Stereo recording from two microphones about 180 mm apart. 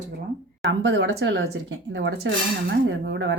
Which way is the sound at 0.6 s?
85° right.